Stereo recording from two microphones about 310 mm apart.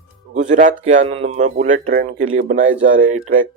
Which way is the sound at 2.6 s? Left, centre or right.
Right.